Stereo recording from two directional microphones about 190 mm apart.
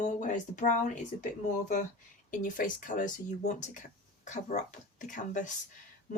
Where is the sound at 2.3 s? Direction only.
45° left (ahead or behind).